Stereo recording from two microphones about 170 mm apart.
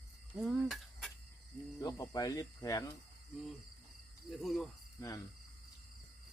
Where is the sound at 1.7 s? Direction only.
20° left (ahead or behind).